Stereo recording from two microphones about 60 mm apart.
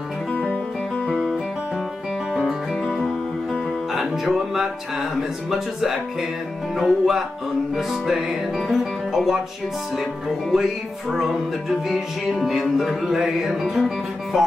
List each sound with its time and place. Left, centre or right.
0.3 s music: centre
2.8 s music: centre
10.5 s music: centre